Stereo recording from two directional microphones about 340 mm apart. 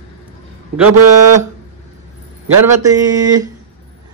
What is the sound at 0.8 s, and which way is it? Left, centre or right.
Speech, right.